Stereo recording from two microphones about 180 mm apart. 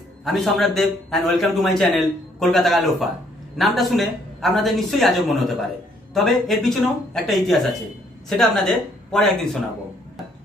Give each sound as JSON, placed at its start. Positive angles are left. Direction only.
{"t": 0.2, "sound": "a man's voice", "side_deg": 0}